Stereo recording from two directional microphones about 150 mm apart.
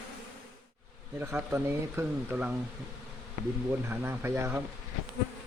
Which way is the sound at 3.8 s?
15° right (ahead or behind).